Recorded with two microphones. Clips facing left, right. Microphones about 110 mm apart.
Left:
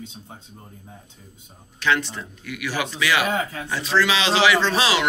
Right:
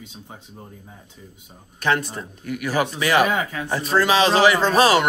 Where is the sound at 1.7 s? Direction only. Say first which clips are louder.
Right 1 dB; 45° right (ahead or behind).